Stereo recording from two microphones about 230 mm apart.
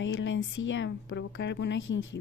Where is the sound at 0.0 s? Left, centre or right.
Left.